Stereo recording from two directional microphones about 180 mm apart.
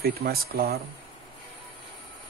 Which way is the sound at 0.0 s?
60° right (ahead or behind).